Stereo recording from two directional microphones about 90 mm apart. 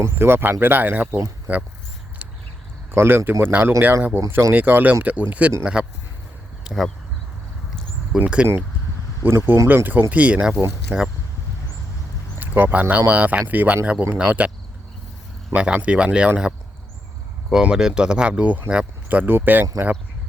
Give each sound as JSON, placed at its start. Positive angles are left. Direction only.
{"t": 0.0, "sound": "speech", "side_deg": -25}
{"t": 2.9, "sound": "speech", "side_deg": -25}
{"t": 6.7, "sound": "speech", "side_deg": 0}
{"t": 8.1, "sound": "speech", "side_deg": -10}
{"t": 9.2, "sound": "speech", "side_deg": -30}
{"t": 10.5, "sound": "speech", "side_deg": -30}
{"t": 12.4, "sound": "speech", "side_deg": -20}
{"t": 15.5, "sound": "speech", "side_deg": -15}
{"t": 17.5, "sound": "speech", "side_deg": -5}